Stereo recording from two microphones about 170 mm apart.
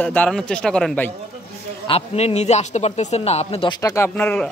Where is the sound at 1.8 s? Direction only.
35° left (ahead or behind).